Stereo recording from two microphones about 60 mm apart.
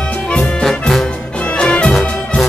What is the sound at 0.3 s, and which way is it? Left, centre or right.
Music, centre.